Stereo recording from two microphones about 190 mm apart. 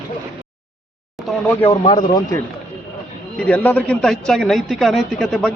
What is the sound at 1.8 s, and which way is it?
Speech, 25° left (ahead or behind).